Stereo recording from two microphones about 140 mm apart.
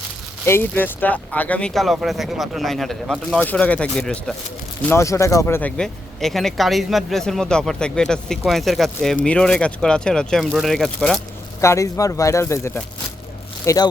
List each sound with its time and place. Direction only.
0.4 s speech: 15° left (ahead or behind)
4.9 s speech: 20° left (ahead or behind); by 11.2 s 5° left (ahead or behind)
11.6 s speech: 20° left (ahead or behind)